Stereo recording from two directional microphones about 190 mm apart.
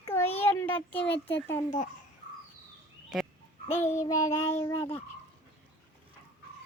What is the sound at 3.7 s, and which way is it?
Child singing, 40° left (ahead or behind).